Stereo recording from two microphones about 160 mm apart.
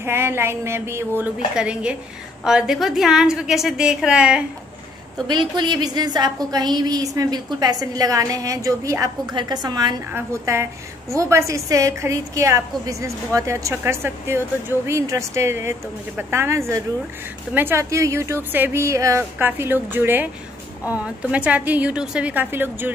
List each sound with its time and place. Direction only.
0.0 s a woman's voice: 15° right (ahead or behind)
5.3 s a woman's voice: 25° right (ahead or behind)